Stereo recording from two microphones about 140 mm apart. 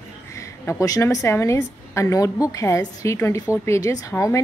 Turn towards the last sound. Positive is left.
turn(degrees=20)  # may be behind; listen again after turning